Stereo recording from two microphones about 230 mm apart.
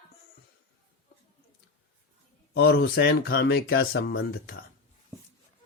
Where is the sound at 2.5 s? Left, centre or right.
Left.